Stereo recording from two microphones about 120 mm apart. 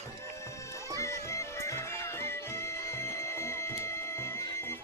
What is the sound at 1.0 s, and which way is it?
Music, 25° left (ahead or behind).